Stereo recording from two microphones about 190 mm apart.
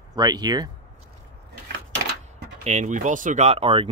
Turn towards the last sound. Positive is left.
turn(degrees=-30)  # may be behind; listen again after turning